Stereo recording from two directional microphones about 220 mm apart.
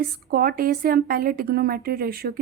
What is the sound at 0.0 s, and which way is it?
A woman's voice, 45° right (ahead or behind).